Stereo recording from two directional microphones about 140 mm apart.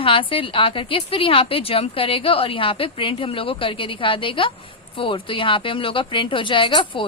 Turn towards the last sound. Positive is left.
turn(degrees=35)  # may be behind; listen again after turning